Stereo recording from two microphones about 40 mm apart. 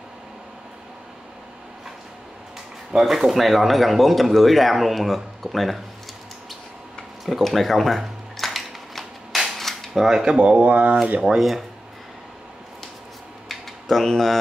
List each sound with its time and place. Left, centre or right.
3.0 s speech: centre
7.2 s a sound: centre
9.6 s cutlery: centre
9.9 s speech: centre
10.2 s speech: right
10.5 s speech: right
11.3 s speech: centre
13.5 s a sound: centre